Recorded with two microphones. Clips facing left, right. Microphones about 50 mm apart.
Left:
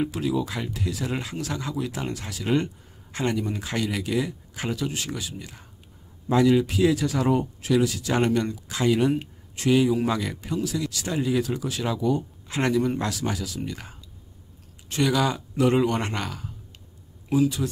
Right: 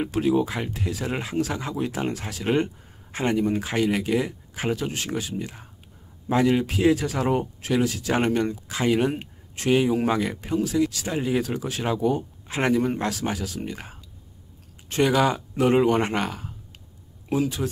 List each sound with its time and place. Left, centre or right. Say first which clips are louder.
0.1 s speech: right 4 dB; right
0.5 s speech: right 1 dB; right
3.3 s speech: right 5 dB; right
11.4 s speech: right 1 dB; right
12.4 s speech: right 1 dB; right